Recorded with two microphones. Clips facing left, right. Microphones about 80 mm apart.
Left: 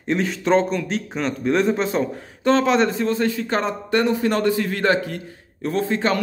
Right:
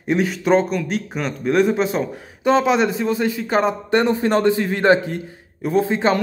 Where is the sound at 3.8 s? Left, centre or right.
Right.